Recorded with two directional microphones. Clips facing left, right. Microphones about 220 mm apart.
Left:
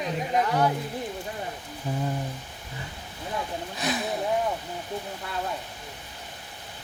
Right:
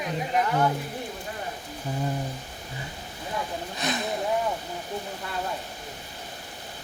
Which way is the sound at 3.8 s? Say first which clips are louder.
Left 1 dB; 5° left (ahead or behind).